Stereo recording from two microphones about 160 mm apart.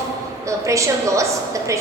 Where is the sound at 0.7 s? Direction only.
20° right (ahead or behind).